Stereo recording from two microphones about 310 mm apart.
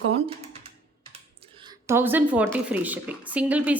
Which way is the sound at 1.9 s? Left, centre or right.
Centre.